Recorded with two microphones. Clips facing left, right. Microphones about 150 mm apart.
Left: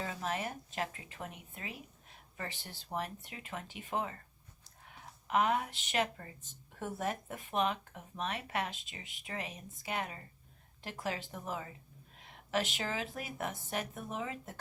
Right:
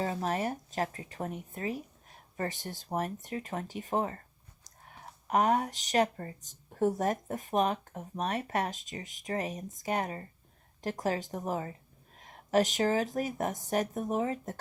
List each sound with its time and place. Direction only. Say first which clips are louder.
0.0 s speech: right 6 dB; 40° right (ahead or behind)